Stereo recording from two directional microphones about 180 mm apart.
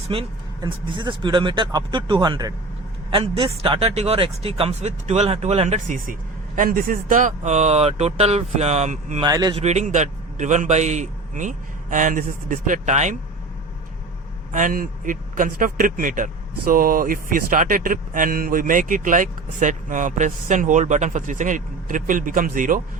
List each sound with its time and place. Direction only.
0.1 s a man's voice: 30° right (ahead or behind)
9.2 s speech: 20° right (ahead or behind)
9.6 s speech: 40° right (ahead or behind)
14.5 s speech: 50° right (ahead or behind)